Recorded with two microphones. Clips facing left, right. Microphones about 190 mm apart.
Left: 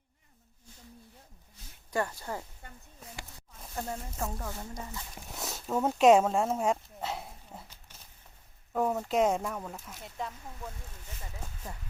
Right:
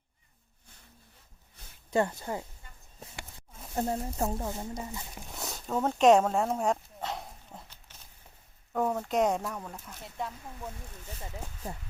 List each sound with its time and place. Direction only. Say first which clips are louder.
1.9 s speech: right 4 dB; 25° right (ahead or behind)
2.6 s a sound: left 6 dB; 60° left (ahead or behind)
3.8 s speech: right 6 dB; 35° right (ahead or behind); by 5.0 s 10° right (ahead or behind)
5.3 s dog: left 1 dB; centre (ahead or behind)
8.7 s speech: even; 5° left (ahead or behind)